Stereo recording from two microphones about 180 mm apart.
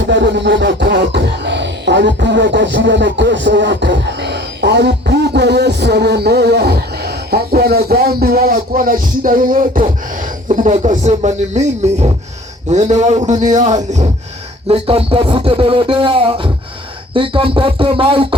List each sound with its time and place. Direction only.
0.1 s beatboxing: 80° right; by 10.7 s 45° right (ahead or behind)
10.7 s speech: 35° right (ahead or behind)